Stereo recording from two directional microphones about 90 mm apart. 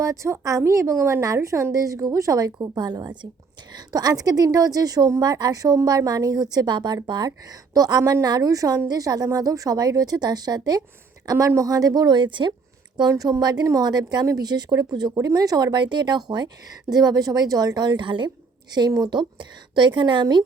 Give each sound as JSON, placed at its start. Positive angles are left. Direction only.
{"t": 0.0, "sound": "a woman's voice", "side_deg": -35}
{"t": 11.3, "sound": "a woman's voice", "side_deg": -35}
{"t": 13.0, "sound": "a woman's voice", "side_deg": -45}